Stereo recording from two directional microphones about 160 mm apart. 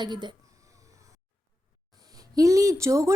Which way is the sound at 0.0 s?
30° right (ahead or behind).